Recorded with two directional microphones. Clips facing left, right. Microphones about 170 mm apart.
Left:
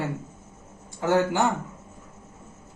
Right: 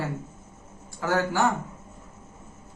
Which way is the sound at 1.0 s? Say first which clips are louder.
Left 4 dB; 20° left (ahead or behind).